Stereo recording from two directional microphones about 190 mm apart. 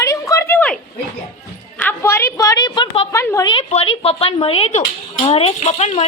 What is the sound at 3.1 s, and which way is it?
Speech, 15° left (ahead or behind).